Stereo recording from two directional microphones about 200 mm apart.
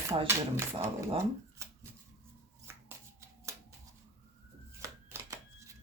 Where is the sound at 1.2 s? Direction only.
15° right (ahead or behind).